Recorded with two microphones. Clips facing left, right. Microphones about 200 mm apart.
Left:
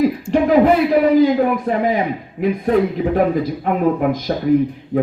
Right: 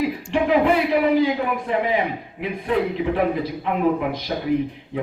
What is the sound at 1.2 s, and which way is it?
Speech, 40° left (ahead or behind).